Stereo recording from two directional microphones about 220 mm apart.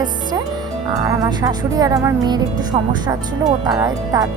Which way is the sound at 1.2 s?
15° right (ahead or behind).